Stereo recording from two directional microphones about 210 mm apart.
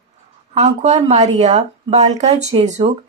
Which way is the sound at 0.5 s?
35° right (ahead or behind).